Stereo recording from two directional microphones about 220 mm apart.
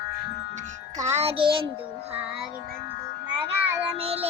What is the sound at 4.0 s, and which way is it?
Speech, 30° right (ahead or behind).